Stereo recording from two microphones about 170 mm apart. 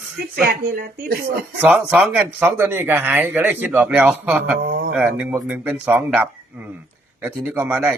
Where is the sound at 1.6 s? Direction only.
10° right (ahead or behind).